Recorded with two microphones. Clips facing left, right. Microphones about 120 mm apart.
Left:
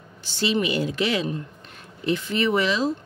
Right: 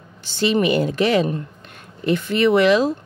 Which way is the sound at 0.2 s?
55° right (ahead or behind).